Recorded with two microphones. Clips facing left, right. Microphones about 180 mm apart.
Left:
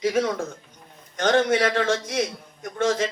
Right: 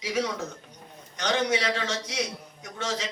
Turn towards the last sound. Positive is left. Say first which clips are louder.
# left 9 dB
turn(degrees=55)  # may be behind; listen again after turning